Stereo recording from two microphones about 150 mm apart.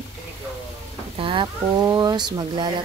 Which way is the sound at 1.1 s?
35° right (ahead or behind).